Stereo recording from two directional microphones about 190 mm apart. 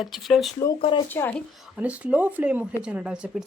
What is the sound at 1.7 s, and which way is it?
Speech, 5° right (ahead or behind).